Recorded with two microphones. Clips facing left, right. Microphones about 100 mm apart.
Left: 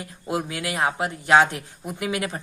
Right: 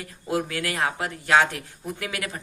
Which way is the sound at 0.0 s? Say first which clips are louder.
Right 1 dB; 20° left (ahead or behind).